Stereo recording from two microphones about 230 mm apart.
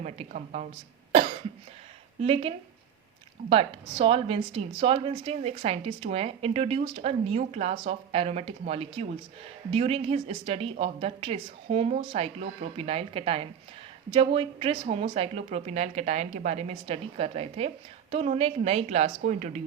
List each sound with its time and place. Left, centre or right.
0.0 s speech: right
2.2 s speech: right